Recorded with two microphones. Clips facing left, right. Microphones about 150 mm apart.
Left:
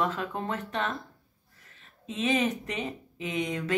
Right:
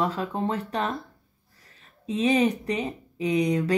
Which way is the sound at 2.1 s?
35° right (ahead or behind).